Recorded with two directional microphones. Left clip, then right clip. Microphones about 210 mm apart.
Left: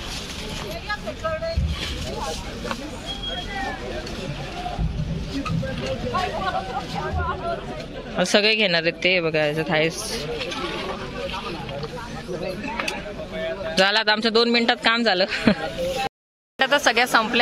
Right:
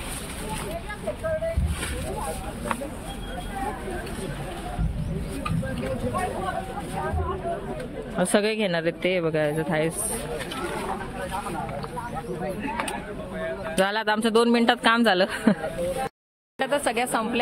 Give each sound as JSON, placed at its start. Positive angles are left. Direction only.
{"t": 8.2, "sound": "speech", "side_deg": -10}
{"t": 13.7, "sound": "speech", "side_deg": -5}
{"t": 16.5, "sound": "speech", "side_deg": 10}